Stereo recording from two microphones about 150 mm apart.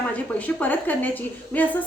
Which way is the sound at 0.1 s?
10° left (ahead or behind).